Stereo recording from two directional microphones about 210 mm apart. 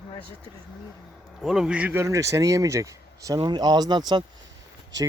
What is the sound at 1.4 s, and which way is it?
Speech, centre (ahead or behind).